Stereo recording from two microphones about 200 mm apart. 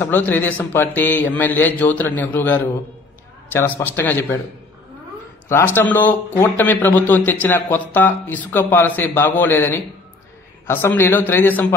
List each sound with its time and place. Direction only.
0.0 s speech: 10° left (ahead or behind)
5.8 s speech: 10° left (ahead or behind)